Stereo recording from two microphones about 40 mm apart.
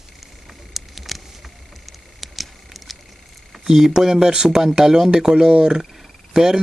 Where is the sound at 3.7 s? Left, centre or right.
Centre.